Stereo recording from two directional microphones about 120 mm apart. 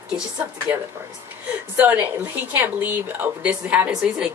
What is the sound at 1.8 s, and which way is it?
Speech, 15° right (ahead or behind).